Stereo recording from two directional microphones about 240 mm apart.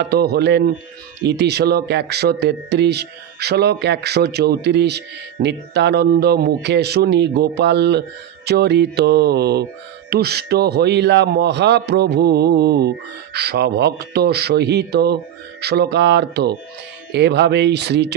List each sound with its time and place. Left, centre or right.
0.0 s speech: right